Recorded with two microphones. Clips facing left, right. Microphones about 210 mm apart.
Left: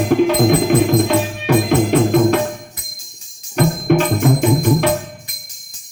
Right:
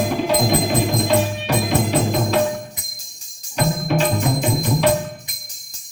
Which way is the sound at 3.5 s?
55° left (ahead or behind).